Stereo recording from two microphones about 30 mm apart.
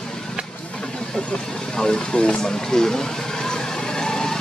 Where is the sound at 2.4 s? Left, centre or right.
Left.